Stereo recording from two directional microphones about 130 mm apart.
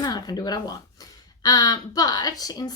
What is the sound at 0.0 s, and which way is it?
Speech, 30° left (ahead or behind).